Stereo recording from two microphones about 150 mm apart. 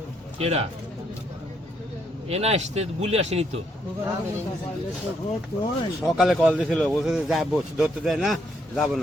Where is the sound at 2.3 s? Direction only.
45° right (ahead or behind).